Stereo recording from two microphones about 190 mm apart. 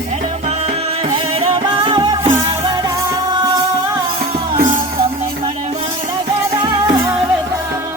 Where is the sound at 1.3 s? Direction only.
25° right (ahead or behind).